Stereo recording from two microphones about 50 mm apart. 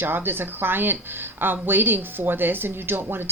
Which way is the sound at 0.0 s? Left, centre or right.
Right.